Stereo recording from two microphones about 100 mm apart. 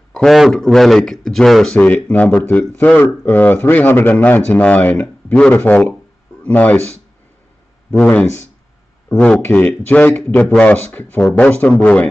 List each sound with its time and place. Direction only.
0.1 s speech: 5° left (ahead or behind)
1.8 s a man's voice: 15° left (ahead or behind)
8.0 s a man's voice: 15° left (ahead or behind)
9.4 s a man's voice: 20° left (ahead or behind)